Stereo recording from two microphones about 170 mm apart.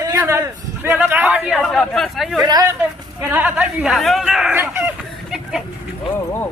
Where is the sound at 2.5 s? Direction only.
20° right (ahead or behind).